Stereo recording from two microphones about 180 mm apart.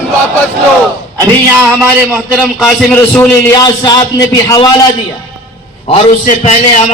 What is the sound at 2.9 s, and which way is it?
Speech, 5° left (ahead or behind).